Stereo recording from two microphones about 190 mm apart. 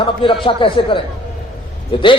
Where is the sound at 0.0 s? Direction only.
25° left (ahead or behind).